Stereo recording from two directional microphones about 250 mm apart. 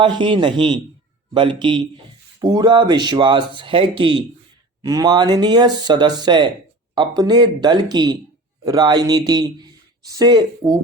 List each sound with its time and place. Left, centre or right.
0.0 s a man's voice: centre